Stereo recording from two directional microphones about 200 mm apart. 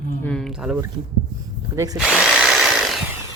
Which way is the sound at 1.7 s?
15° right (ahead or behind).